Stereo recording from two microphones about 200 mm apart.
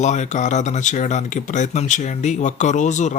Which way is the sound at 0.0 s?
35° left (ahead or behind).